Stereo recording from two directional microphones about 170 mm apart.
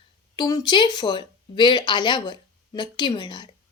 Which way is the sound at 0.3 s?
25° left (ahead or behind).